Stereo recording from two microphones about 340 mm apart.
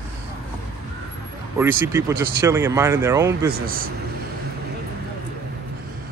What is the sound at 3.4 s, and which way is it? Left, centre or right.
Speech, right.